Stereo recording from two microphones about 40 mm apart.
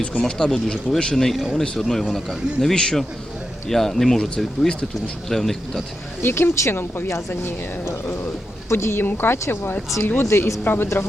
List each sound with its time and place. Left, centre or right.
0.2 s speech: centre
1.1 s speech: centre
3.7 s speech: centre
6.2 s speech: left
8.7 s a woman's voice: left
10.2 s speech: left